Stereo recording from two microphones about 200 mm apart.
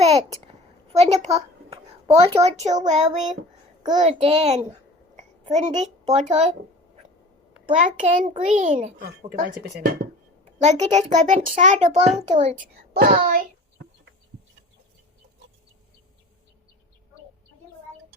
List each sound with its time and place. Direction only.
0.0 s a sound: 30° right (ahead or behind)
0.9 s a child's voice: 35° right (ahead or behind)
7.8 s a child's voice: 40° right (ahead or behind)
10.4 s a child's voice: 35° right (ahead or behind)
13.1 s child singing: 45° right (ahead or behind)